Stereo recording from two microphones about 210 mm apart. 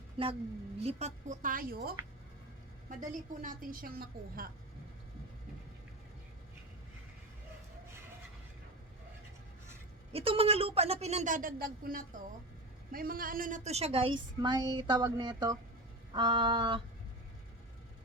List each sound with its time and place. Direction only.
0.2 s a woman's voice: 25° right (ahead or behind); by 1.9 s 45° right (ahead or behind)
3.0 s a woman's voice: 40° right (ahead or behind)
10.1 s a woman's voice: 25° right (ahead or behind)